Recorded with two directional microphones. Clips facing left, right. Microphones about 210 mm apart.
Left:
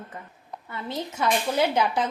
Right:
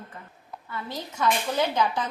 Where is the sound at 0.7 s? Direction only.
20° left (ahead or behind).